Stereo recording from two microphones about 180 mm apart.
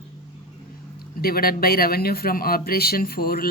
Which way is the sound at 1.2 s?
55° left (ahead or behind).